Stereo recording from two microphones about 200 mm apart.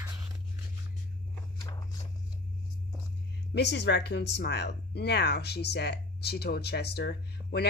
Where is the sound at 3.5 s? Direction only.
55° left (ahead or behind).